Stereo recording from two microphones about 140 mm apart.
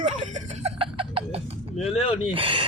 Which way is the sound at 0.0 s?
60° right (ahead or behind).